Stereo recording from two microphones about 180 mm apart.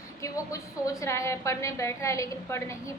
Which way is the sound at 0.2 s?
20° left (ahead or behind).